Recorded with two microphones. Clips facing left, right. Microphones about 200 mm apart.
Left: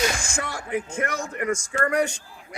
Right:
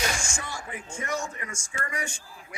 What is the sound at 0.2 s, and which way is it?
Music, 60° left (ahead or behind).